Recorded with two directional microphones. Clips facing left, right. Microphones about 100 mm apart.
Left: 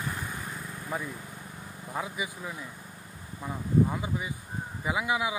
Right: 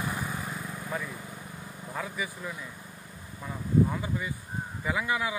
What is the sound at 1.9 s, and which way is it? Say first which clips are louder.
Speech: left 1 dB; 15° left (ahead or behind).